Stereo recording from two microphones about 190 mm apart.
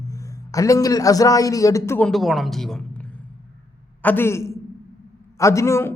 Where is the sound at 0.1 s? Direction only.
15° left (ahead or behind).